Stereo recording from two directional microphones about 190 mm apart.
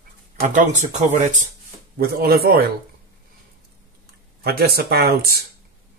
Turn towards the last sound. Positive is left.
turn(degrees=-55)  # may be behind; listen again after turning